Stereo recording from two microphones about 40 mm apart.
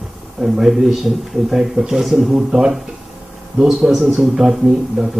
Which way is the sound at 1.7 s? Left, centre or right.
Centre.